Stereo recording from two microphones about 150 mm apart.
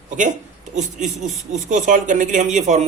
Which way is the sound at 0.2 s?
55° right (ahead or behind).